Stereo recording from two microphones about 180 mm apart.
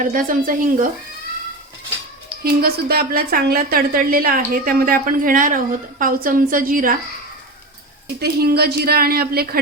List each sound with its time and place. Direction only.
0.0 s a woman's voice: 50° right (ahead or behind)
2.4 s a woman's voice: 55° right (ahead or behind)
8.0 s a woman's voice: 60° right (ahead or behind)